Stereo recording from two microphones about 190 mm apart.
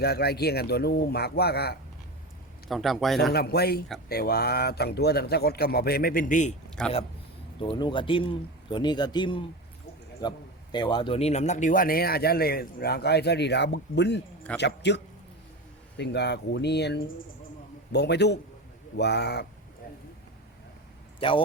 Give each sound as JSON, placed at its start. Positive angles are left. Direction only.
{"t": 0.0, "sound": "speech", "side_deg": 55}
{"t": 2.6, "sound": "a man's voice", "side_deg": 0}
{"t": 3.3, "sound": "speech", "side_deg": 55}
{"t": 6.8, "sound": "a man's voice", "side_deg": 5}
{"t": 7.6, "sound": "speech", "side_deg": 25}
{"t": 21.2, "sound": "speech", "side_deg": 30}